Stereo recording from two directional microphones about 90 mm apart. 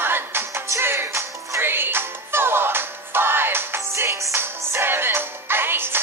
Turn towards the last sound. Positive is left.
turn(degrees=-25)  # may be behind; listen again after turning